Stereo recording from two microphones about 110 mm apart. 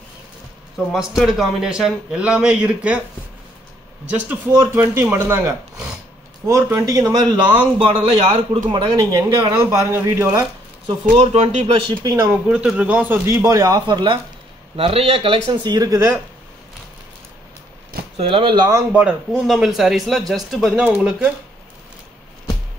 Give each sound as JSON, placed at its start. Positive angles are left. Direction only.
{"t": 0.7, "sound": "a man's voice", "side_deg": 0}
{"t": 4.1, "sound": "a man's voice", "side_deg": -15}
{"t": 9.5, "sound": "a man's voice", "side_deg": -25}
{"t": 11.1, "sound": "speech", "side_deg": -70}
{"t": 12.0, "sound": "speech", "side_deg": -30}
{"t": 12.3, "sound": "a man's voice", "side_deg": -10}
{"t": 14.8, "sound": "speech", "side_deg": -60}
{"t": 18.1, "sound": "a man's voice", "side_deg": -55}
{"t": 19.3, "sound": "a man's voice", "side_deg": 0}